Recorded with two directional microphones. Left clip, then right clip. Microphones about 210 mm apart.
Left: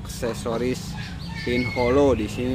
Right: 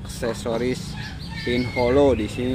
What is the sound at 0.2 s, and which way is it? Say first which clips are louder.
Speech: right 1 dB; 5° right (ahead or behind).